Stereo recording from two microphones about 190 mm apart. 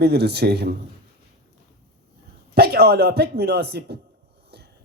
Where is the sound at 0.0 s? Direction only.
60° right (ahead or behind).